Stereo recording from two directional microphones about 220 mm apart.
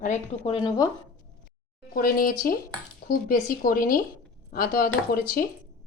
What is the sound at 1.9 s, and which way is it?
Speech, 40° left (ahead or behind).